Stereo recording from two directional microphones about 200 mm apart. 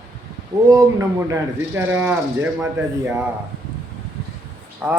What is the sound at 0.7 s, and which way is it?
Speech, 15° right (ahead or behind).